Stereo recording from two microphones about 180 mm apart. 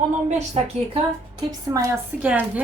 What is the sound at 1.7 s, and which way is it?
Speech, 20° right (ahead or behind).